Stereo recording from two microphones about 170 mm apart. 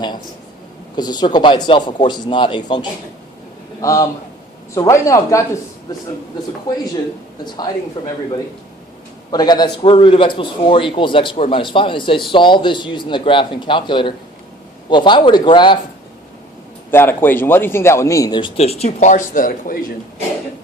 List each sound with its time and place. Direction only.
0.9 s a man's voice: 25° left (ahead or behind)
8.0 s a man's voice: 25° left (ahead or behind)
9.3 s a man's voice: 25° left (ahead or behind)
16.9 s a man's voice: 15° left (ahead or behind); by 19.9 s 55° left (ahead or behind)